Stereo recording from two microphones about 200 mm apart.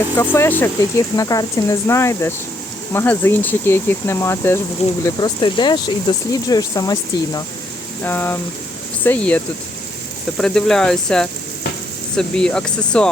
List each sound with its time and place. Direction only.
0.2 s speech: 10° left (ahead or behind)